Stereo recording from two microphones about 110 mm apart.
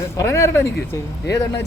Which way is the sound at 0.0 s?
25° left (ahead or behind).